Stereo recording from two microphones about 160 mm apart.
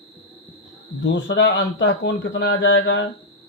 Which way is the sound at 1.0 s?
90° left.